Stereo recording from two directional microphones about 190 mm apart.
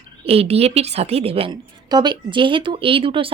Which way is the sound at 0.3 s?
30° right (ahead or behind).